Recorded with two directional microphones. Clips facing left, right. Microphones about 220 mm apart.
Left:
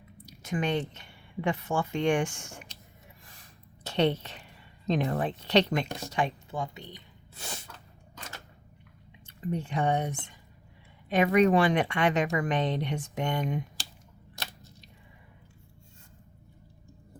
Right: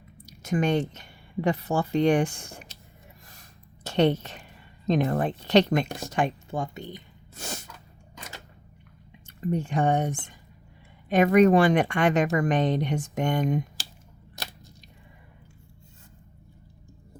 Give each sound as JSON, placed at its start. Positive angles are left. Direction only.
{"t": 0.3, "sound": "a woman's voice", "side_deg": -45}
{"t": 3.8, "sound": "a woman's voice", "side_deg": -45}
{"t": 6.0, "sound": "snort", "side_deg": -50}
{"t": 9.2, "sound": "speech", "side_deg": -45}